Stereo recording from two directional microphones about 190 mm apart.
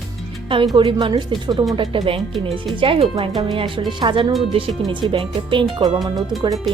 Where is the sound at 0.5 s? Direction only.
25° right (ahead or behind).